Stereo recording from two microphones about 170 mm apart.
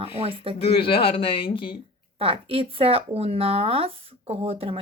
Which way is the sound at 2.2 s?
35° right (ahead or behind).